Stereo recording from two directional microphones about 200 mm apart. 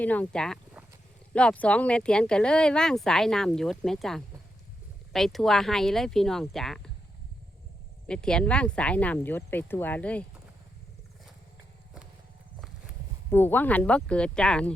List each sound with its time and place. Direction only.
0.0 s speech: 5° left (ahead or behind)
8.0 s speech: 5° left (ahead or behind)
13.3 s speech: 10° left (ahead or behind)